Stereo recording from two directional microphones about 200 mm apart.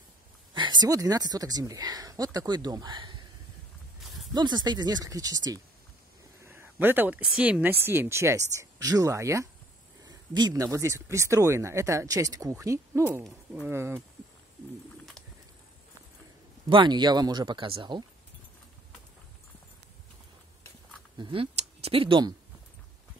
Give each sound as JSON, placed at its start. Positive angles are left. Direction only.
{"t": 0.6, "sound": "speech", "side_deg": -20}
{"t": 4.0, "sound": "a sound", "side_deg": 0}
{"t": 4.3, "sound": "speech", "side_deg": -20}
{"t": 16.6, "sound": "speech", "side_deg": -25}
{"t": 21.2, "sound": "speech", "side_deg": -25}